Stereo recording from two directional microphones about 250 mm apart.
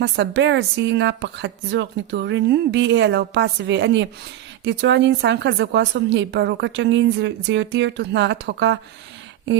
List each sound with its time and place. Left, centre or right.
0.0 s speech: right